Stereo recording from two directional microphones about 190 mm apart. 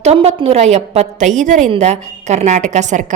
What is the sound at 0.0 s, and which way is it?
A woman's voice, 35° right (ahead or behind).